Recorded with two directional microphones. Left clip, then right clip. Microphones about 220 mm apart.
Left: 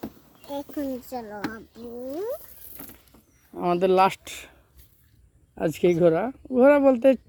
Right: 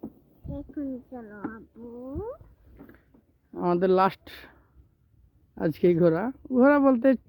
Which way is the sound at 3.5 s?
10° right (ahead or behind).